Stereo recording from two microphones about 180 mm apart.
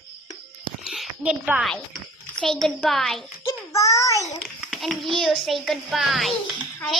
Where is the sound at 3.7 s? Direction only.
15° left (ahead or behind).